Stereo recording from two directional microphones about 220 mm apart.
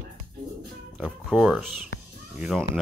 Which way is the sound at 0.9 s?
Centre (ahead or behind).